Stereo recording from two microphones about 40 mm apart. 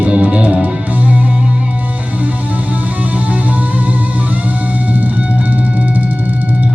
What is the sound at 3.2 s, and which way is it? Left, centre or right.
Music, right.